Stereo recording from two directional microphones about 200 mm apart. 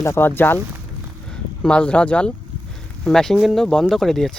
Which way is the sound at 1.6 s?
5° left (ahead or behind).